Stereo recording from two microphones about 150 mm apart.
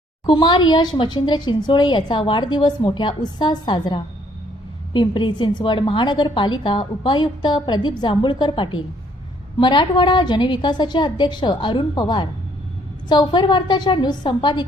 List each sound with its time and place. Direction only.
0.3 s a woman's voice: 30° left (ahead or behind)